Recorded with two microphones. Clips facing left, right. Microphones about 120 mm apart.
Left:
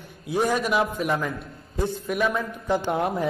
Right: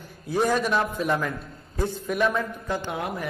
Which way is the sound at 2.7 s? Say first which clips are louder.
Left 7 dB; 25° left (ahead or behind).